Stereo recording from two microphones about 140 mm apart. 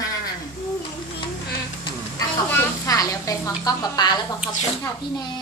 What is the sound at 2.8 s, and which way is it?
A woman's voice, 25° left (ahead or behind).